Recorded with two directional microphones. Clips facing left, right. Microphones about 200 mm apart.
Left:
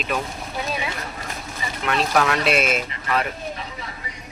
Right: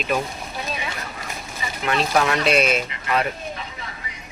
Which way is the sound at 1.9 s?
Centre (ahead or behind).